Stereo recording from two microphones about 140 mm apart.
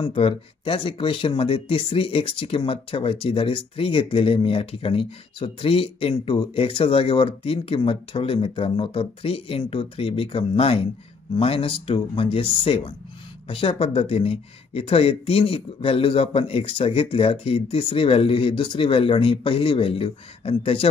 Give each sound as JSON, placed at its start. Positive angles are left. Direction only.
{"t": 0.0, "sound": "speech", "side_deg": 40}